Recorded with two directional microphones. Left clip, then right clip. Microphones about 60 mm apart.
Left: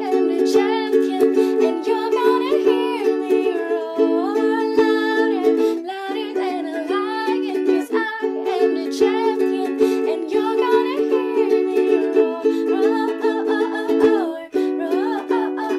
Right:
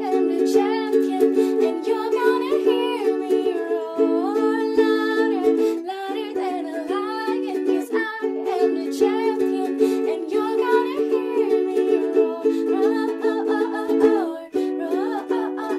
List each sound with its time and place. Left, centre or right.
0.1 s music: centre
7.6 s music: left
14.1 s music: centre